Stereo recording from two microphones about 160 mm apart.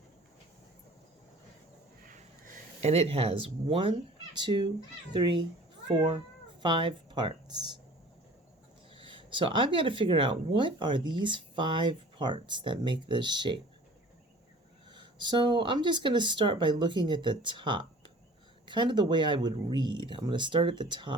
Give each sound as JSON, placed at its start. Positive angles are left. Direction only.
{"t": 2.8, "sound": "speech", "side_deg": -40}
{"t": 8.9, "sound": "speech", "side_deg": -30}
{"t": 14.8, "sound": "speech", "side_deg": -30}